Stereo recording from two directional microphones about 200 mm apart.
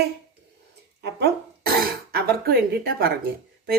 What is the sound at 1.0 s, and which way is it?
Speech, 55° right (ahead or behind).